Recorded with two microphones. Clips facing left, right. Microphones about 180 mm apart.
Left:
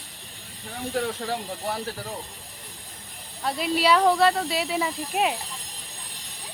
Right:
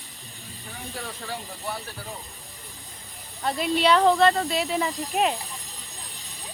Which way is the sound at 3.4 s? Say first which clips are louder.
Right 1 dB; centre (ahead or behind).